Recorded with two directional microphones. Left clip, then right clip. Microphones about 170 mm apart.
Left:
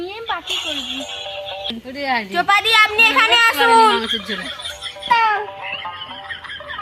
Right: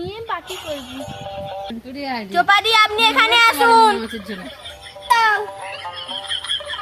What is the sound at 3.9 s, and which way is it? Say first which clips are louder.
Speech: left 6 dB; 25° left (ahead or behind).